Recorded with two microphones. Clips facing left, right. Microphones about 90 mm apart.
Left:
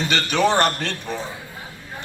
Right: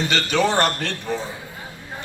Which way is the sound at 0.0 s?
20° left (ahead or behind).